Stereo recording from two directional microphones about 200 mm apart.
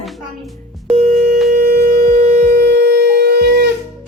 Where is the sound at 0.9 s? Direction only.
40° right (ahead or behind).